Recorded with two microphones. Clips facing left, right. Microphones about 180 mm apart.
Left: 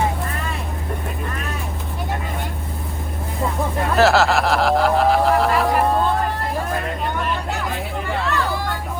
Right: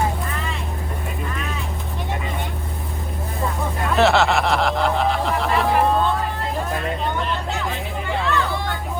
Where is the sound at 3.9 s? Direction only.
Centre (ahead or behind).